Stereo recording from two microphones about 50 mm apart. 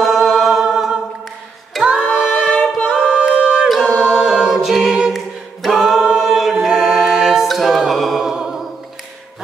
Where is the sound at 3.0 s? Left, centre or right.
Centre.